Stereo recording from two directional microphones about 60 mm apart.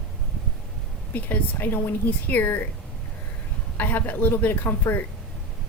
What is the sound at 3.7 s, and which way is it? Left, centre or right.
Speech, left.